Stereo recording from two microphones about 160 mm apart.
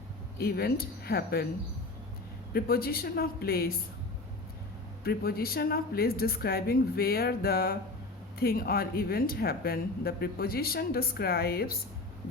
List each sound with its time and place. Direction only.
0.3 s speech: 75° left (ahead or behind)
2.5 s speech: 70° left (ahead or behind)
5.0 s speech: 70° left (ahead or behind)